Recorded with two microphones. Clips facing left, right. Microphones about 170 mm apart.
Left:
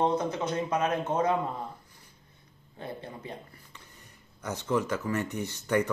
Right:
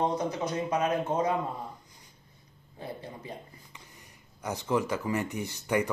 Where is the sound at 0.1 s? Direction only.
10° right (ahead or behind).